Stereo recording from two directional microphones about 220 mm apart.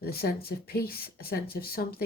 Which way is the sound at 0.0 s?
45° left (ahead or behind).